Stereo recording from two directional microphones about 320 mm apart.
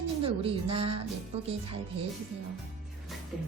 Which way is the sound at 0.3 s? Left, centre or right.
Centre.